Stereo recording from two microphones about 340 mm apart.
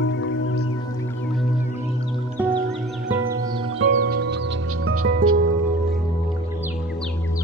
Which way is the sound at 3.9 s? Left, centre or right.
Right.